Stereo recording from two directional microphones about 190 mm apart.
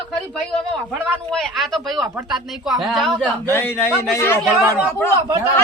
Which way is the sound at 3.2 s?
10° left (ahead or behind).